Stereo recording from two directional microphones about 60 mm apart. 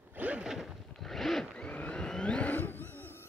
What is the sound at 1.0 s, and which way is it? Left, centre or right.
Zipper, centre.